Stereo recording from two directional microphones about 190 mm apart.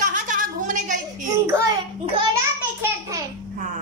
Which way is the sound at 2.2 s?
15° right (ahead or behind).